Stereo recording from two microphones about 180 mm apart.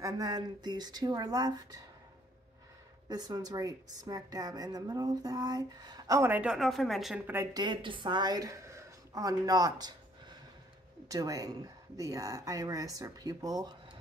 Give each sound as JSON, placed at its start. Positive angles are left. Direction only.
{"t": 0.0, "sound": "a woman's voice", "side_deg": -20}
{"t": 3.1, "sound": "a woman's voice", "side_deg": -20}
{"t": 7.3, "sound": "a woman's voice", "side_deg": -25}